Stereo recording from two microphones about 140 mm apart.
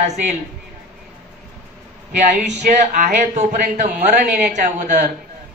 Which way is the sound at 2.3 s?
65° right (ahead or behind).